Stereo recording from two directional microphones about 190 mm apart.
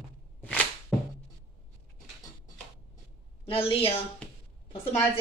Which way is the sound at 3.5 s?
30° left (ahead or behind).